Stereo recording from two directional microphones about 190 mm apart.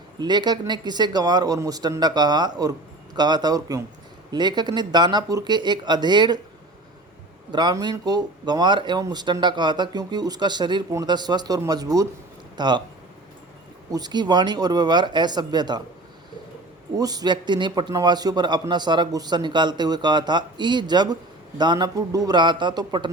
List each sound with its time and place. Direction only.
0.2 s speech: 20° right (ahead or behind)
7.5 s speech: 20° right (ahead or behind)
13.9 s speech: 20° right (ahead or behind)
17.0 s speech: 20° right (ahead or behind)